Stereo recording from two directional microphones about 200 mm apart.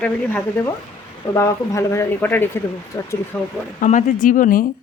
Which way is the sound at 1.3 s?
15° left (ahead or behind).